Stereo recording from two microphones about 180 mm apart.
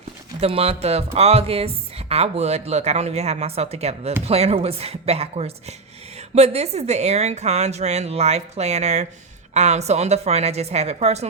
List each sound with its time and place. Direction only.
0.3 s speech: 35° right (ahead or behind)